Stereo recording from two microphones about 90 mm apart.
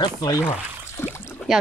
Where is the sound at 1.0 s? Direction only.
25° left (ahead or behind).